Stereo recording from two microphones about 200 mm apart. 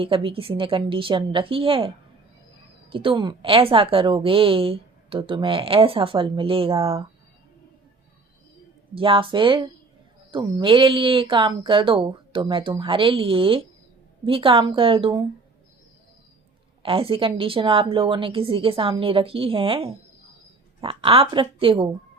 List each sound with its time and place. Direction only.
0.0 s a woman's voice: 25° right (ahead or behind)
2.9 s a woman's voice: 25° right (ahead or behind)
9.0 s a woman's voice: 25° right (ahead or behind)
16.8 s a woman's voice: 30° right (ahead or behind)